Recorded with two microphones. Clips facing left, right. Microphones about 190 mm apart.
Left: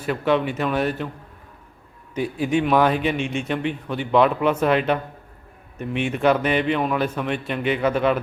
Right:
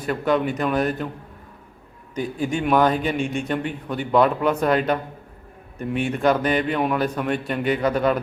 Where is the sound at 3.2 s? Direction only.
35° right (ahead or behind).